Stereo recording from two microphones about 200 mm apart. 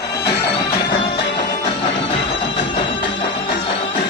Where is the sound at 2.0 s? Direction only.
30° left (ahead or behind).